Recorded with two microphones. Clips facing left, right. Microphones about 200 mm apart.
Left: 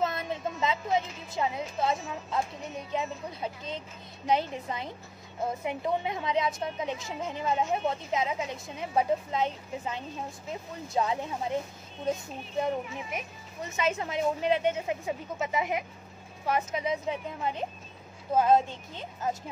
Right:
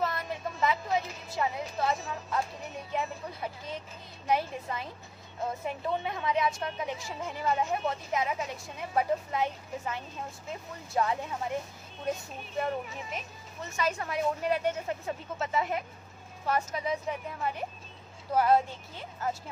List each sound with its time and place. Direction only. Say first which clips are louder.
0.0 s music: left 2 dB; 20° left (ahead or behind)
2.9 s speech: left 1 dB; 20° left (ahead or behind)